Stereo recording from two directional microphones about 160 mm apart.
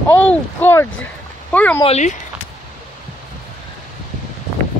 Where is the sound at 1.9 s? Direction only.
45° left (ahead or behind).